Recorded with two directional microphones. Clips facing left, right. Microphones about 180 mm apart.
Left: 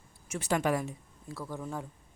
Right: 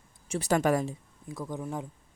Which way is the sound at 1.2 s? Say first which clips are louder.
Right 3 dB; 15° right (ahead or behind).